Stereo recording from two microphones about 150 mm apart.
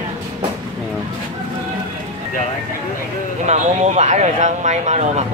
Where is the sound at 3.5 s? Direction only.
50° right (ahead or behind).